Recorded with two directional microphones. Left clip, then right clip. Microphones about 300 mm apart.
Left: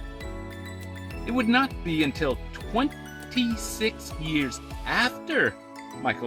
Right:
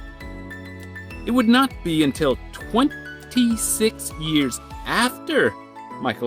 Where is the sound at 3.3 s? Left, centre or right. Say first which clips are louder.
Right 6 dB; right.